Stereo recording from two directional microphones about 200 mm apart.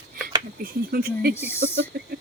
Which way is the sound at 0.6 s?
50° right (ahead or behind).